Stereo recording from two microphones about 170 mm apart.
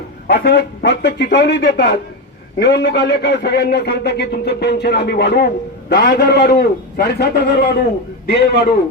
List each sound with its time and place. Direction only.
0.3 s a man's voice: 65° left (ahead or behind)